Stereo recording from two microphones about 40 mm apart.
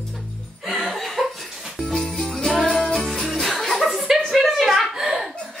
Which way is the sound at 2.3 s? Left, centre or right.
Centre.